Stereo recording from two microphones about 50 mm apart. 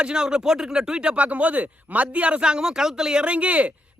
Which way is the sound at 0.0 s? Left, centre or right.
Centre.